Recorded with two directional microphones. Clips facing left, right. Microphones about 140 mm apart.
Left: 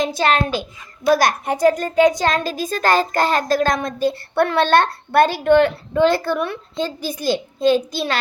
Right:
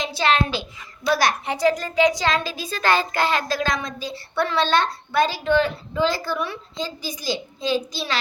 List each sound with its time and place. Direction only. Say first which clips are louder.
0.0 s a child's voice: left 3 dB; 45° left (ahead or behind)